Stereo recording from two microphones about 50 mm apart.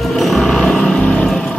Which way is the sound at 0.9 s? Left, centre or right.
Centre.